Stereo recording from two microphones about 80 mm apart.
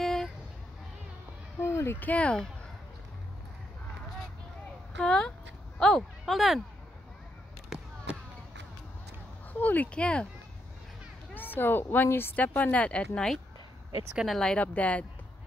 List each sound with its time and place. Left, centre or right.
0.0 s a sound: centre
1.6 s a sound: left
2.0 s speech: centre
4.9 s speech: centre
7.7 s basketball bounce: centre
9.5 s speech: left
11.3 s speech: left